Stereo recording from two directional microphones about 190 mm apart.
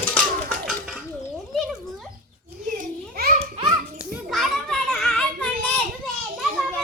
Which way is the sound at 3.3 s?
30° right (ahead or behind).